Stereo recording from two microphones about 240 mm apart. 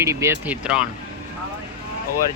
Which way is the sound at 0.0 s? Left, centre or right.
Centre.